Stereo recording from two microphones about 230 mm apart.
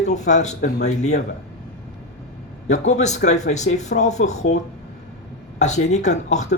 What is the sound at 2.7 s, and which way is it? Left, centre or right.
Speech, left.